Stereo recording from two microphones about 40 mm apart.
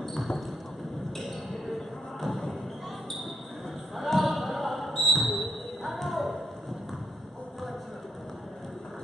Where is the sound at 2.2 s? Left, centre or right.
Centre.